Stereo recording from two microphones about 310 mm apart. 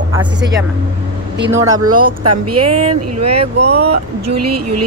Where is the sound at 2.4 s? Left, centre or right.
Right.